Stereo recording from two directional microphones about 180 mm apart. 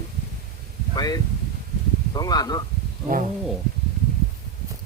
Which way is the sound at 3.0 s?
45° right (ahead or behind).